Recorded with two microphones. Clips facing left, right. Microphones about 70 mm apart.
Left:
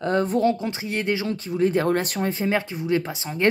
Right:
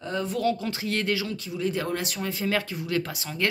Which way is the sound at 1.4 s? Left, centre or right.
Left.